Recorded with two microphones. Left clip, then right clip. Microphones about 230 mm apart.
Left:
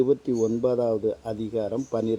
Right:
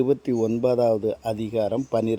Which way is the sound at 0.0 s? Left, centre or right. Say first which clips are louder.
Even; right.